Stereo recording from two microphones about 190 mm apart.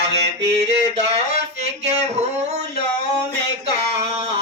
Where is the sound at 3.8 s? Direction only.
35° right (ahead or behind).